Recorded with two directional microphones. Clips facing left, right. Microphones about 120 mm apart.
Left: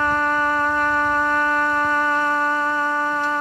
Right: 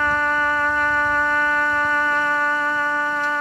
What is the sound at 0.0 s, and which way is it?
Shofar, 35° left (ahead or behind).